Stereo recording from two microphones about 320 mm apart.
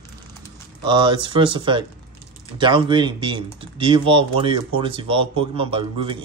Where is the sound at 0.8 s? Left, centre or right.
Centre.